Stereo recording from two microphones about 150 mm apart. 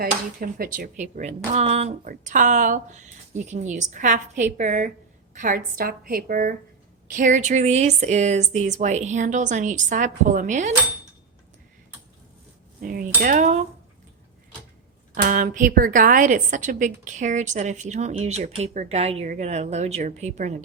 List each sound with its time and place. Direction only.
0.0 s a woman's voice: 75° right (ahead or behind); by 1.9 s 45° right (ahead or behind)
2.0 s a woman's voice: 60° right (ahead or behind)
12.8 s a woman's voice: 75° right (ahead or behind); by 13.6 s 55° right (ahead or behind)
15.1 s a woman's voice: 65° right (ahead or behind)